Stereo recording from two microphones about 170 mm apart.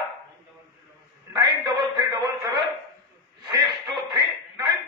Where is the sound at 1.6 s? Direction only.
25° right (ahead or behind).